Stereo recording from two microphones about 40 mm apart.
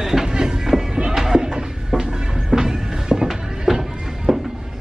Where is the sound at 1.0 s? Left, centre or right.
Centre.